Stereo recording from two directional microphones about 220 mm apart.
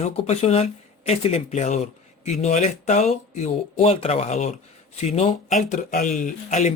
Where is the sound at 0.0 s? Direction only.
30° left (ahead or behind).